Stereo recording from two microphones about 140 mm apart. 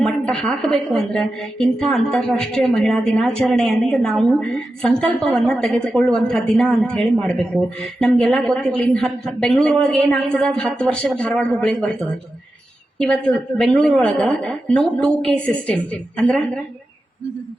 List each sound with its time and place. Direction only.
0.0 s a woman's voice: 5° left (ahead or behind)
13.0 s a woman's voice: 5° left (ahead or behind)